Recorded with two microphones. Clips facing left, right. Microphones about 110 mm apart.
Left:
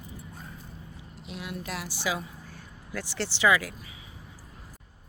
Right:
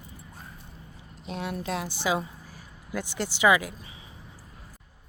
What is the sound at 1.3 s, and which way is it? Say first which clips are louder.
Speech: right 5 dB; 35° right (ahead or behind).